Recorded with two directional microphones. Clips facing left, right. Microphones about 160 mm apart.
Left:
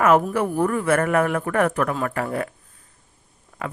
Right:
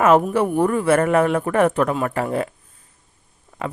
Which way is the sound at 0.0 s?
25° right (ahead or behind).